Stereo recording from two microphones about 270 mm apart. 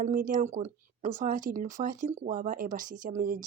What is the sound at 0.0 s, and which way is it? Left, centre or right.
Speech, right.